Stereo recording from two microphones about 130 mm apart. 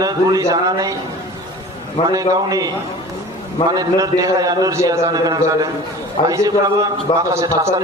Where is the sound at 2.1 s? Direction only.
30° right (ahead or behind).